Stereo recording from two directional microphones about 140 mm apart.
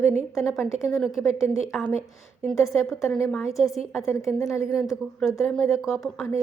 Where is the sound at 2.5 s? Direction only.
Centre (ahead or behind).